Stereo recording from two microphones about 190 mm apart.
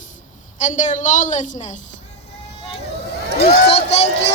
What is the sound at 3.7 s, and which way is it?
Child singing, 35° left (ahead or behind).